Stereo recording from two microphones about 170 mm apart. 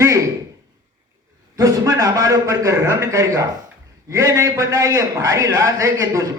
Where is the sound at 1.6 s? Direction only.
20° right (ahead or behind).